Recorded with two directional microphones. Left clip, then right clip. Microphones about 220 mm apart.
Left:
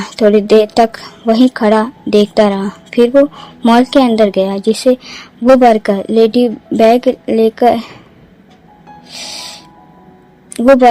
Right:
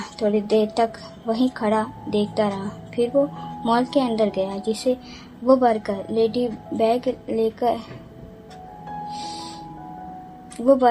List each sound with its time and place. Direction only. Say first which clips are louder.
0.0 s a woman's voice: left 13 dB; 50° left (ahead or behind)
10.5 s a woman's voice: left 11 dB; 50° left (ahead or behind)